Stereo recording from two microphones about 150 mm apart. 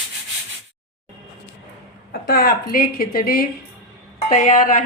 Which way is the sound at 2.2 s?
85° left.